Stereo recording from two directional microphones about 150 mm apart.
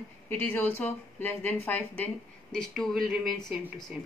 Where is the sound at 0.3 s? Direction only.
10° left (ahead or behind).